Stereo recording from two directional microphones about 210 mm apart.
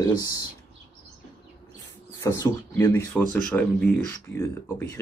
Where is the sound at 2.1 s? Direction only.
15° left (ahead or behind).